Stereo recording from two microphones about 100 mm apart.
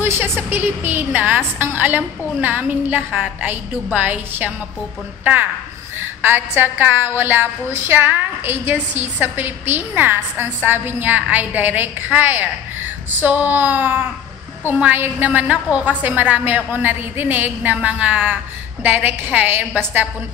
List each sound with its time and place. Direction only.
0.0 s a woman's voice: 20° right (ahead or behind)